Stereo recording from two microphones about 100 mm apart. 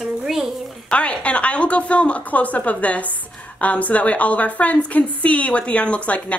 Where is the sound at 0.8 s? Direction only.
10° left (ahead or behind).